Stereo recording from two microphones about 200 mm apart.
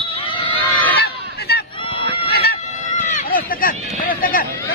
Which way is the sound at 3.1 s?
40° left (ahead or behind).